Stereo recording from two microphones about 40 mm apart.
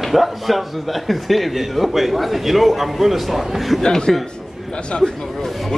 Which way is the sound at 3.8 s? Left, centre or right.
Centre.